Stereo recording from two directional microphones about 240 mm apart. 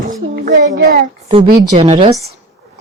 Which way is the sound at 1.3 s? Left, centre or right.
Right.